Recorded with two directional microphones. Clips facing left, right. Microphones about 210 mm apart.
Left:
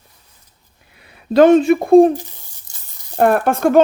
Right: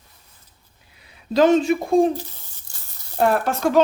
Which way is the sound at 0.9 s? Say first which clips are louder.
Left 6 dB; 60° left (ahead or behind).